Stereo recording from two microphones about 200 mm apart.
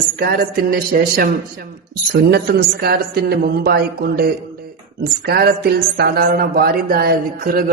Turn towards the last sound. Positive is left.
turn(degrees=-45)  # may be behind; listen again after turning